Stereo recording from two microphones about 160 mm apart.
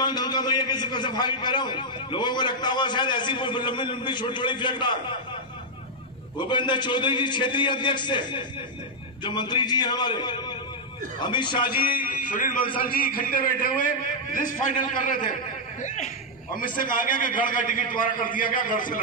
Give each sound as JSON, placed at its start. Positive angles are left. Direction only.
{"t": 0.0, "sound": "a man's voice", "side_deg": 25}
{"t": 12.0, "sound": "a man's voice", "side_deg": 60}
{"t": 16.5, "sound": "a man's voice", "side_deg": 60}